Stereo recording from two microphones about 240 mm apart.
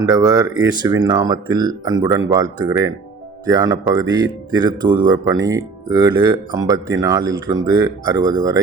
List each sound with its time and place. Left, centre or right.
0.0 s speech: centre